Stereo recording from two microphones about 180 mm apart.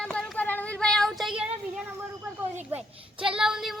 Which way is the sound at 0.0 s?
5° left (ahead or behind).